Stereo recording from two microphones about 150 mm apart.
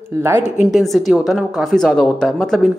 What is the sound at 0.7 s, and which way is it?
Speech, centre (ahead or behind).